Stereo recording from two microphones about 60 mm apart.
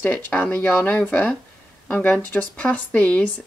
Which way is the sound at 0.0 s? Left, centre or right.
Left.